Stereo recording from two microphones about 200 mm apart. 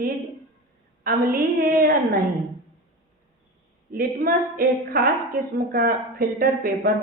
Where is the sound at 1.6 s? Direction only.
50° right (ahead or behind).